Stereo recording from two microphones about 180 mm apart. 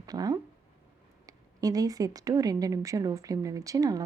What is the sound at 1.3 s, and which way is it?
A woman's voice, 20° right (ahead or behind).